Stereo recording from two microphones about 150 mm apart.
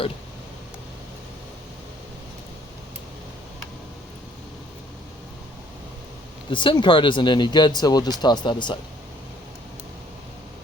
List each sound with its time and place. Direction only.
6.5 s speech: 35° left (ahead or behind)